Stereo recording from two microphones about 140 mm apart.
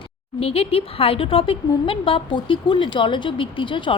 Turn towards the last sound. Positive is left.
turn(degrees=35)  # may be behind; listen again after turning